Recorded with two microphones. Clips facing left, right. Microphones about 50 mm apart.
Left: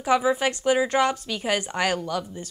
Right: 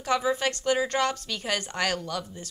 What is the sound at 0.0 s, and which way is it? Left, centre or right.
A woman's voice, centre.